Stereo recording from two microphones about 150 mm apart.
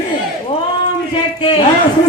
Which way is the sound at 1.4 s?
35° left (ahead or behind).